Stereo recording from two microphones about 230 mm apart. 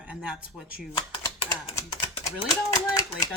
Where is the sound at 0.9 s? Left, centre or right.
Left.